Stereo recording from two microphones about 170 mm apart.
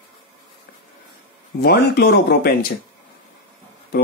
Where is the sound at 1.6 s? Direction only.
70° left (ahead or behind).